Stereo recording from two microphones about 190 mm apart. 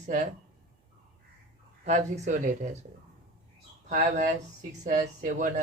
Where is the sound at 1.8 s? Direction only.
35° right (ahead or behind).